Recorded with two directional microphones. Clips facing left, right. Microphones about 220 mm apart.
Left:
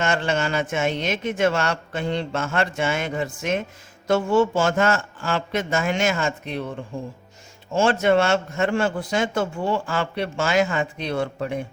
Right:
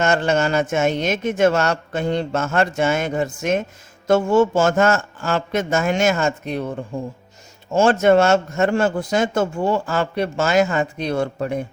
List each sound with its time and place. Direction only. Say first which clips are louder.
0.0 s speech: right 5 dB; 45° right (ahead or behind)
7.7 s speech: right 4 dB; 45° right (ahead or behind)